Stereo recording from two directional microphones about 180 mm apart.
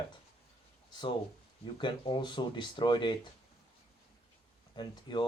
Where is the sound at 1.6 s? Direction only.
25° left (ahead or behind).